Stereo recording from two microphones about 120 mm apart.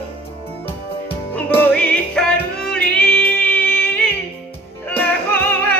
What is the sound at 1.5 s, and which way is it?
Music, 10° left (ahead or behind).